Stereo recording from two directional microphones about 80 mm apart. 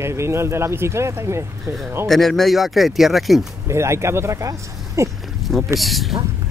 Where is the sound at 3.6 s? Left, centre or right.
Right.